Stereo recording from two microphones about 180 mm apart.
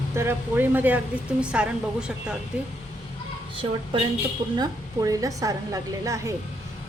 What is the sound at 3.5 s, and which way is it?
A woman's voice, 30° right (ahead or behind).